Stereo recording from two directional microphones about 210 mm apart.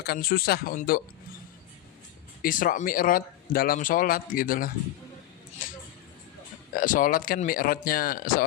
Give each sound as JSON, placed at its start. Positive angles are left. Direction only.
{"t": 0.0, "sound": "speech", "side_deg": 45}
{"t": 2.4, "sound": "speech", "side_deg": 40}
{"t": 6.7, "sound": "speech", "side_deg": 40}